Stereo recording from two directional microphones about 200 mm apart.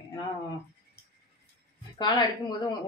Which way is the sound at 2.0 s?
20° left (ahead or behind).